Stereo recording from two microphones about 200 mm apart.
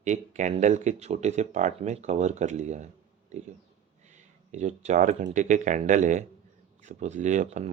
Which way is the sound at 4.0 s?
35° right (ahead or behind).